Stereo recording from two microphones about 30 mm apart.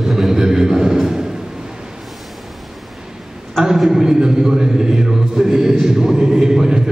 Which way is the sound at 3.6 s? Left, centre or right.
Centre.